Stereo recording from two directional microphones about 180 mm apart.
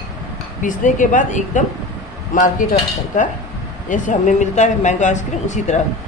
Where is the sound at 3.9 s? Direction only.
45° left (ahead or behind).